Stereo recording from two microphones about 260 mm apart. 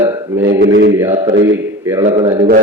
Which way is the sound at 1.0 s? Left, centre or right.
Centre.